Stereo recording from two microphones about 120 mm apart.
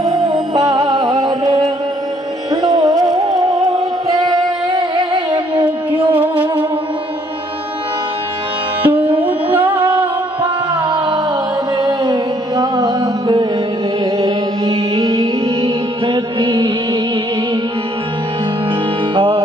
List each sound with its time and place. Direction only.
0.0 s music: 30° right (ahead or behind)
2.5 s music: 35° right (ahead or behind)
5.9 s music: 15° right (ahead or behind)
8.8 s music: 15° right (ahead or behind)
10.8 s music: 40° right (ahead or behind)
15.4 s music: 45° right (ahead or behind)
19.1 s music: 40° right (ahead or behind)